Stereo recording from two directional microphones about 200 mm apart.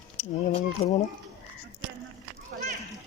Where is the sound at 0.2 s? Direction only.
30° left (ahead or behind).